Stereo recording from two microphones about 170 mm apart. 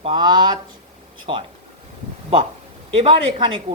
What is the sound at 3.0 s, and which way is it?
Speech, 30° right (ahead or behind).